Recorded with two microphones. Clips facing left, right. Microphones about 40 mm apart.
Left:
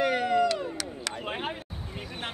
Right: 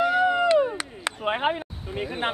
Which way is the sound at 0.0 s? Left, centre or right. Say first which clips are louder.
Right 5 dB; left.